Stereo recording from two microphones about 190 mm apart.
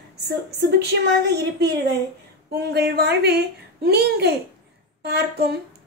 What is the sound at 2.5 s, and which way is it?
A woman's voice, 60° right (ahead or behind).